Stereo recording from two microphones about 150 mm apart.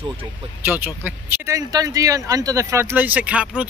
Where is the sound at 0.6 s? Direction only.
15° right (ahead or behind).